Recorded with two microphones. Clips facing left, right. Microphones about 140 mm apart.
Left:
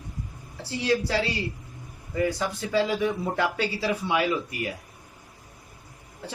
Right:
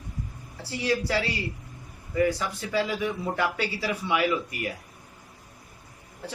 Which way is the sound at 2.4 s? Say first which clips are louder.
Left 3 dB; 30° left (ahead or behind).